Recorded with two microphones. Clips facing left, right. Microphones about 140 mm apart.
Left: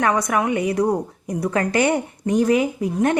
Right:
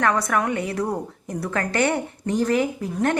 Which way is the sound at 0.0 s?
15° left (ahead or behind).